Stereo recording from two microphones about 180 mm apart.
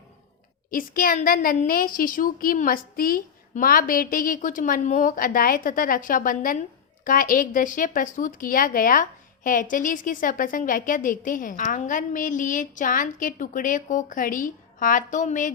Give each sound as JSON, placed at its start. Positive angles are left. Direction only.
{"t": 0.7, "sound": "speech", "side_deg": 50}